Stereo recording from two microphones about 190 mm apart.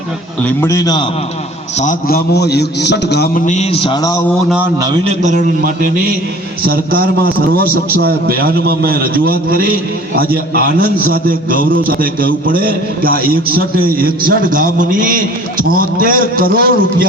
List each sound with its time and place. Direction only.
0.4 s a man's voice: 15° left (ahead or behind)
1.8 s a man's voice: 45° left (ahead or behind)
3.4 s speech: 35° left (ahead or behind); by 4.2 s 20° left (ahead or behind)
4.4 s a man's voice: 5° right (ahead or behind)
4.8 s a man's voice: 25° right (ahead or behind)
6.7 s a man's voice: 50° right (ahead or behind)